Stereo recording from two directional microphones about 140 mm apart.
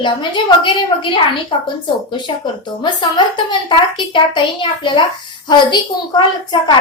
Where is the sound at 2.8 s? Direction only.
35° left (ahead or behind).